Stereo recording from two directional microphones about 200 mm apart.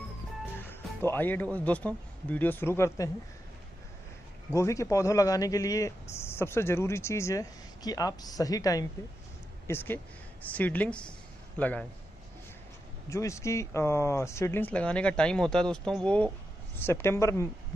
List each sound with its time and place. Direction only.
0.7 s speech: 10° left (ahead or behind)
4.6 s speech: 15° left (ahead or behind)
13.1 s speech: 15° left (ahead or behind)